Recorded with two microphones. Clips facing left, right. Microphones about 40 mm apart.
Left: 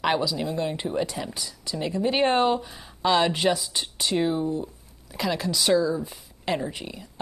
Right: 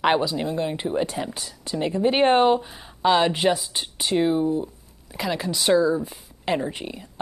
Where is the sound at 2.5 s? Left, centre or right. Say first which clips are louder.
Right 4 dB; centre.